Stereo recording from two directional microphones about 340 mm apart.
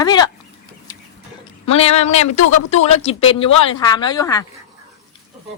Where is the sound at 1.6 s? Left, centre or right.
Centre.